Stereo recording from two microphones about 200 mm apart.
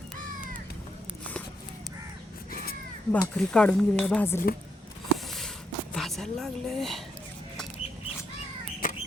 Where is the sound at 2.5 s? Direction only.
45° left (ahead or behind).